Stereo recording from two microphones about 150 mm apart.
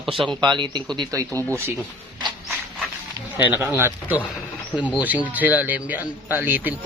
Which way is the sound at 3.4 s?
15° right (ahead or behind).